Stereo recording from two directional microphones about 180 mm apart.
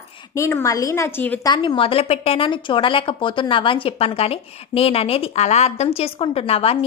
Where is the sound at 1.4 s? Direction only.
25° left (ahead or behind).